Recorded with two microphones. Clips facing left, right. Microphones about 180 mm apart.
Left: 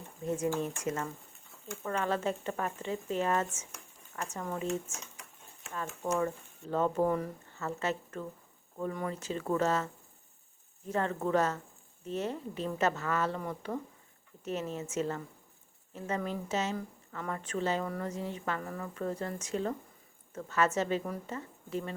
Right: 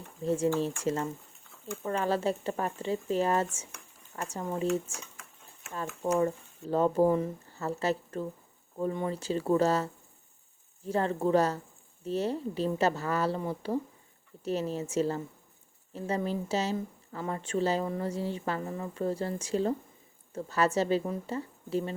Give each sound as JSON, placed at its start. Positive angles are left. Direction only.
{"t": 0.3, "sound": "speech", "side_deg": -30}